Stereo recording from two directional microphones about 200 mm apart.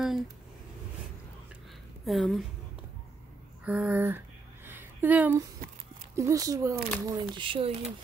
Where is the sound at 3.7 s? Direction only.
5° right (ahead or behind).